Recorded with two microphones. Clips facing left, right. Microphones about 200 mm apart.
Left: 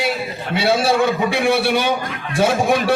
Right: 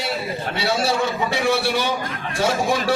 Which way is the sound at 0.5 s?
55° left (ahead or behind).